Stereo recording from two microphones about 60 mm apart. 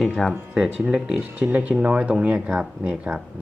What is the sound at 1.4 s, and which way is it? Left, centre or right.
Speech, right.